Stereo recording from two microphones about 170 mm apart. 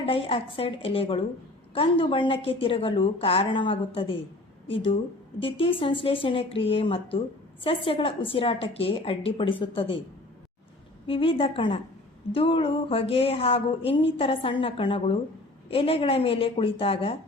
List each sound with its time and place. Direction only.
0.0 s a woman's voice: 35° left (ahead or behind)
11.0 s a woman's voice: 30° left (ahead or behind)